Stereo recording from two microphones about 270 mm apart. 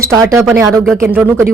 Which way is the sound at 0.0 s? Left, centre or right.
Centre.